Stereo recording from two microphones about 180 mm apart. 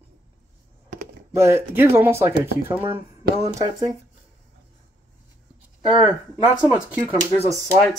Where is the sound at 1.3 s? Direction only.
15° right (ahead or behind).